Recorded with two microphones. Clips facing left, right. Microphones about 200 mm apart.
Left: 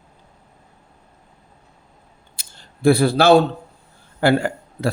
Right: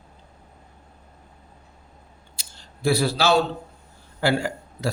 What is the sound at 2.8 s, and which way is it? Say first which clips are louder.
Speech: left 7 dB; 55° left (ahead or behind).